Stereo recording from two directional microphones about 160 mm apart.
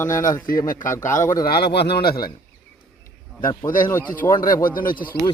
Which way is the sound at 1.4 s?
75° left (ahead or behind).